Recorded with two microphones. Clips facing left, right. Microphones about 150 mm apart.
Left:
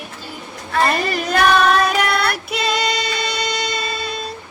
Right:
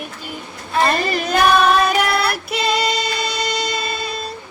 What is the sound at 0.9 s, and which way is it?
Child singing, centre (ahead or behind).